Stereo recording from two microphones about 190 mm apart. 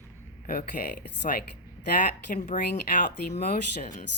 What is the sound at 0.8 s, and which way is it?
Speech, 50° left (ahead or behind).